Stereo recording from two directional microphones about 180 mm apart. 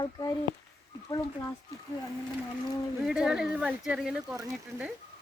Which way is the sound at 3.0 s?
5° right (ahead or behind).